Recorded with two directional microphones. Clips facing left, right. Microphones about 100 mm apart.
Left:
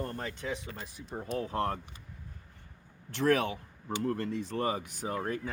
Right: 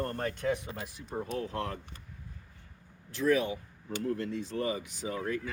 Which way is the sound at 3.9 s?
60° left (ahead or behind).